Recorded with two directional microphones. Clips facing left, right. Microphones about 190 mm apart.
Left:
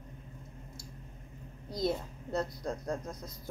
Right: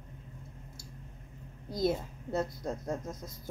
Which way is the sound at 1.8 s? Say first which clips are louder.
Right 2 dB; centre (ahead or behind).